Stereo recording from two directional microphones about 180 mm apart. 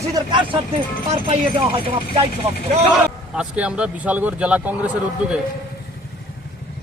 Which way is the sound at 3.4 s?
5° right (ahead or behind).